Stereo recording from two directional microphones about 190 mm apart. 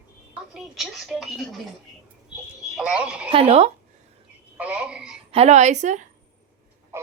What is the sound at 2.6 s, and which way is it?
Speech, 5° right (ahead or behind).